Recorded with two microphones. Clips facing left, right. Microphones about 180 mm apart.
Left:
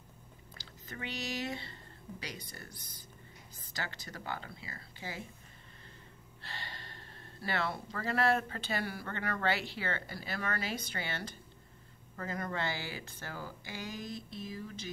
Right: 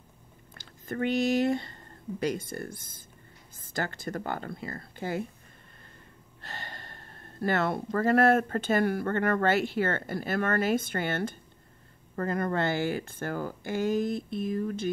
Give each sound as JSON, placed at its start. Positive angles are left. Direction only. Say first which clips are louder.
{"t": 0.6, "sound": "speech", "louder": "right 14 dB", "side_deg": -50}
{"t": 6.4, "sound": "speech", "louder": "right 4 dB", "side_deg": -50}